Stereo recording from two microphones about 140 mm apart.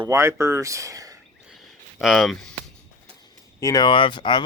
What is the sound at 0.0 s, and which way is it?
Speech, 20° right (ahead or behind).